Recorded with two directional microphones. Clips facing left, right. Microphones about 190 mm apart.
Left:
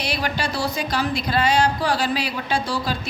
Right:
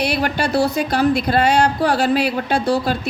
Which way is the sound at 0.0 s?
55° right (ahead or behind).